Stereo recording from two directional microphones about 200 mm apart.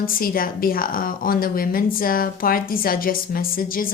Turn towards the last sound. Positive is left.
turn(degrees=45)  # may be behind; listen again after turning